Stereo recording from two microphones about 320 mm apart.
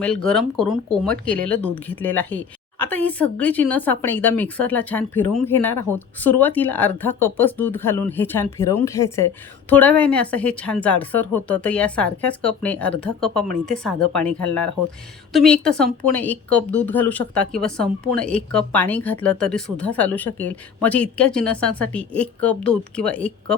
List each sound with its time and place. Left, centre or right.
0.0 s speech: centre